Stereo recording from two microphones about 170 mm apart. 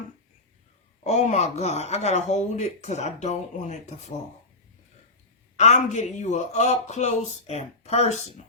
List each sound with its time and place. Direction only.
1.0 s speech: 40° left (ahead or behind)
5.5 s a woman's voice: 40° left (ahead or behind)